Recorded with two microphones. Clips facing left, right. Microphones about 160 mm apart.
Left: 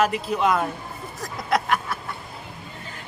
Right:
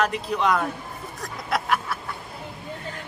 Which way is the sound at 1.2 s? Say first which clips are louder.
Left 4 dB; centre (ahead or behind).